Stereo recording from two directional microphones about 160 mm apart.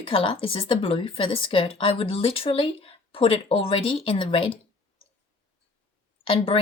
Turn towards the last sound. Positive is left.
turn(degrees=35)  # may be behind; listen again after turning